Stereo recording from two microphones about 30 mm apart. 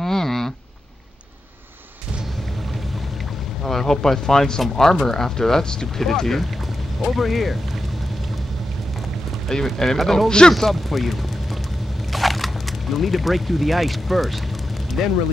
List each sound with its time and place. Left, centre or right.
0.0 s a sound: centre
3.6 s speech: centre
7.0 s speech: centre
9.5 s speech: centre
10.5 s speech: centre
12.1 s crushing: centre
12.9 s speech: centre